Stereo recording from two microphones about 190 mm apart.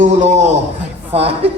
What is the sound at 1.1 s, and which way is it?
Music, 30° right (ahead or behind).